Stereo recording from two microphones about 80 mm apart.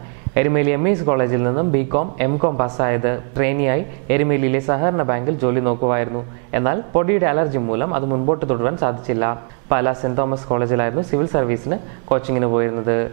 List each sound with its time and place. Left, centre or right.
0.3 s a man's voice: centre